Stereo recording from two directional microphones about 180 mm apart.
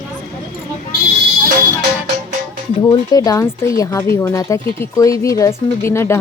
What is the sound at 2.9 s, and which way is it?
Speech, 20° left (ahead or behind).